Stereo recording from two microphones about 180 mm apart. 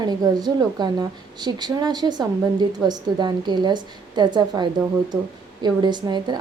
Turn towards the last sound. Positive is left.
turn(degrees=-25)  # may be behind; listen again after turning